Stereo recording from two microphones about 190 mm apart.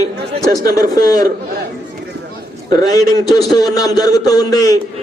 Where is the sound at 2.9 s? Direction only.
20° left (ahead or behind).